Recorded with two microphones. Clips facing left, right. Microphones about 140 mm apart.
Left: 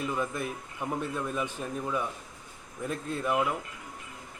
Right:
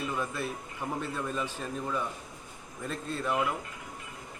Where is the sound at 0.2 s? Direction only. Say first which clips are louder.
Left 2 dB; 15° left (ahead or behind).